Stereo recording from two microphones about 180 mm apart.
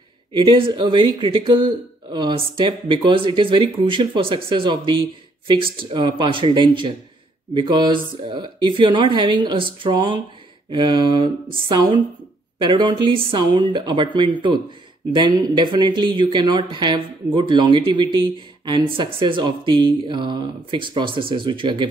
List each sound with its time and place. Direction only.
0.3 s speech: 30° right (ahead or behind)